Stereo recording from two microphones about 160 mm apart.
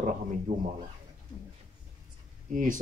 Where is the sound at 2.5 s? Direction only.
55° right (ahead or behind).